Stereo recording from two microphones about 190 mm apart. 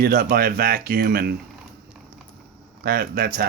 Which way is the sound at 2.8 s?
50° right (ahead or behind).